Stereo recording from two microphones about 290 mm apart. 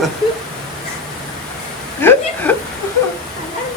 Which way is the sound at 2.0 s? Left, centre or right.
Centre.